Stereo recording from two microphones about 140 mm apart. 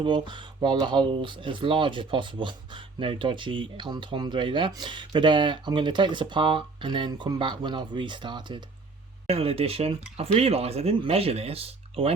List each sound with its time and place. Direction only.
0.0 s speech: 35° right (ahead or behind)
9.2 s speech: 45° right (ahead or behind)